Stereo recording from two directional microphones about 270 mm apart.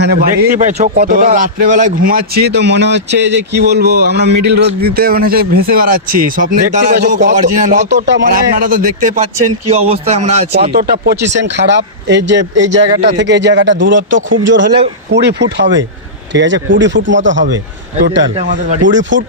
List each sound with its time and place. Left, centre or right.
0.0 s speech: right
11.3 s speech: right
18.8 s speech: right